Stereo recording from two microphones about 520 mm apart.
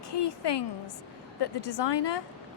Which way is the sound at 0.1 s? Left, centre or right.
Left.